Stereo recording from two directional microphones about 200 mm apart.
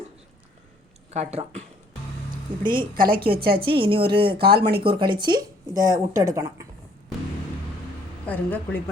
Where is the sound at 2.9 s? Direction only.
45° right (ahead or behind).